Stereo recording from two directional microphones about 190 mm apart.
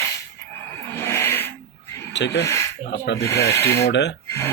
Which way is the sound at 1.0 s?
10° left (ahead or behind).